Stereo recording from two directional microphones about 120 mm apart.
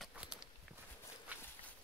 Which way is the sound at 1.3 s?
15° right (ahead or behind).